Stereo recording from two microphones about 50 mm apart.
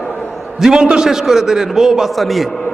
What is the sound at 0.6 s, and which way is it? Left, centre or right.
A man's voice, centre.